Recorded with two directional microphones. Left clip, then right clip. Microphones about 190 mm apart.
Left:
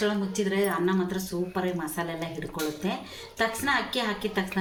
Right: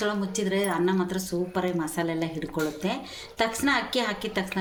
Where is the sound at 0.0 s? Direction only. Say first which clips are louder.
Even; 55° right (ahead or behind).